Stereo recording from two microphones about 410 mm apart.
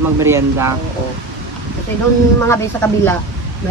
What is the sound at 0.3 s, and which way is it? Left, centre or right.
Speech, centre.